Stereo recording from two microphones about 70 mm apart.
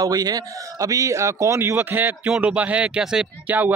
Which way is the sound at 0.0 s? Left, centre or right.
Right.